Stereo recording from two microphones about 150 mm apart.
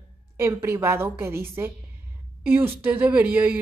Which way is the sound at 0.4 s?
15° right (ahead or behind).